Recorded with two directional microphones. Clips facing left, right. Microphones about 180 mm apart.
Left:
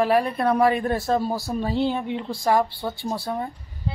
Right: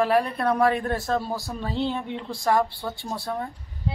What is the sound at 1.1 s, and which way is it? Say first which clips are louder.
Speech: left 4 dB; 15° left (ahead or behind).